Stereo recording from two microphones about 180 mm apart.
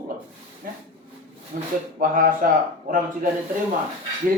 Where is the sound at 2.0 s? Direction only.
50° right (ahead or behind).